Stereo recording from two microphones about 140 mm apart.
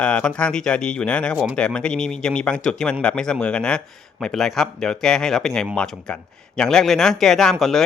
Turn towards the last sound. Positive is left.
turn(degrees=0)  # may be behind; listen again after turning